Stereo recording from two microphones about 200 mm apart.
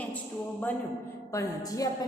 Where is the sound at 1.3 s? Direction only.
15° left (ahead or behind).